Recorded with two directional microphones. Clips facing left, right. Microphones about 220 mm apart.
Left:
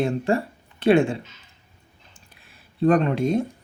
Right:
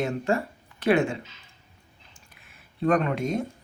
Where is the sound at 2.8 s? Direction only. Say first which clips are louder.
Left 5 dB; 30° left (ahead or behind).